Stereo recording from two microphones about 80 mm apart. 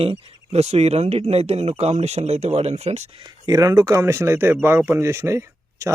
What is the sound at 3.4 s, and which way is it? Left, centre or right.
Speech, right.